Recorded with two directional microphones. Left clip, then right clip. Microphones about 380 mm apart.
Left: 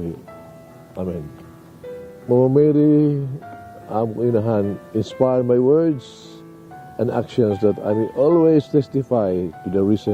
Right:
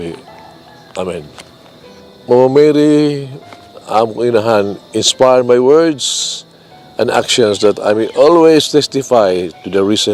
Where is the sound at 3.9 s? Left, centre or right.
Centre.